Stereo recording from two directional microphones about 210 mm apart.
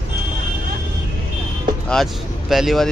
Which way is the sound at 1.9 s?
Centre (ahead or behind).